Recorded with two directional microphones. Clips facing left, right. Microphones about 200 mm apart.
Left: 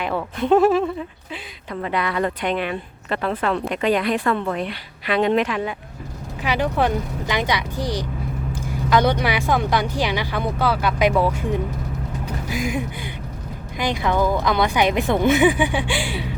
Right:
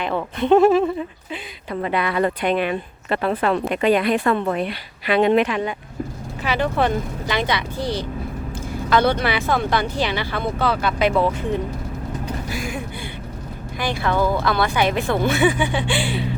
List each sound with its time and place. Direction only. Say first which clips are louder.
0.0 s speech: right 1 dB; 5° left (ahead or behind)
1.7 s a woman's voice: right 2 dB; 10° right (ahead or behind)
4.2 s a woman's voice: right 2 dB; 20° right (ahead or behind)
4.5 s speech: right 2 dB; 10° right (ahead or behind)
6.4 s speech: even; 15° left (ahead or behind)